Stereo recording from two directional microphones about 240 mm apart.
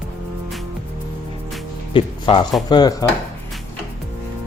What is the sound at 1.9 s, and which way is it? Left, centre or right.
Speech, left.